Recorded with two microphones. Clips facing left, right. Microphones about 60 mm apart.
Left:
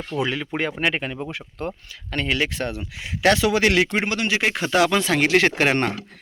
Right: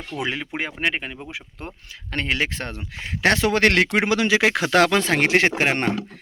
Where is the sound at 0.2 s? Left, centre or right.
Right.